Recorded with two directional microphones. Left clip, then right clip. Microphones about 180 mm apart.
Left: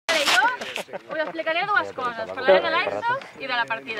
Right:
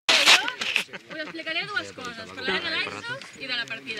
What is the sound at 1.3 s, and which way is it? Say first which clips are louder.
Speech: left 6 dB; 20° left (ahead or behind).